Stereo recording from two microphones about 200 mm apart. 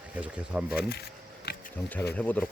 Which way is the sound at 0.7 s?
50° left (ahead or behind).